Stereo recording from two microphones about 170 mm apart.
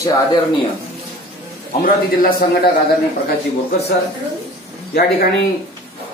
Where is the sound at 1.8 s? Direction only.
55° left (ahead or behind).